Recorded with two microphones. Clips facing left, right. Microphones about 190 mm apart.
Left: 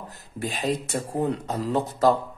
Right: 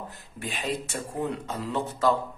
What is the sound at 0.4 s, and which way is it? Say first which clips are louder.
Speech: left 5 dB; 40° left (ahead or behind).